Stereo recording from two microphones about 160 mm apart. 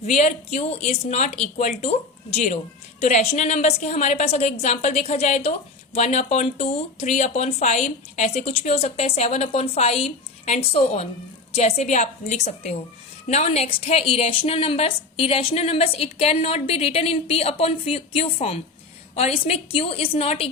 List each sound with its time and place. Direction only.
0.0 s a woman's voice: 45° left (ahead or behind)